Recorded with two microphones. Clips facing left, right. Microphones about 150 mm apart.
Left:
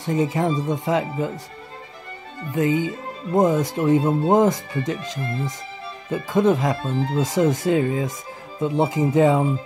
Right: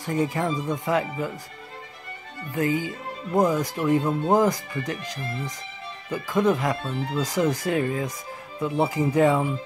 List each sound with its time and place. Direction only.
0.0 s speech: 20° left (ahead or behind)
2.5 s speech: 20° left (ahead or behind)
6.9 s speech: 35° left (ahead or behind)
7.2 s speech: 25° left (ahead or behind)